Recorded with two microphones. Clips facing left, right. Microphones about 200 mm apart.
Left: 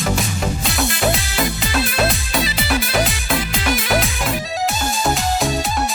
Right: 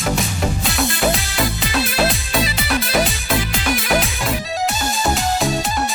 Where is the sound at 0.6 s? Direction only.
Centre (ahead or behind).